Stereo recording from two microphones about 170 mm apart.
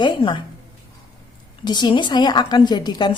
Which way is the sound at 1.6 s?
25° left (ahead or behind).